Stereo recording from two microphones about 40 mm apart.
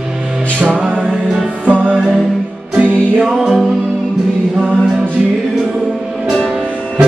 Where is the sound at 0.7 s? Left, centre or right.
Right.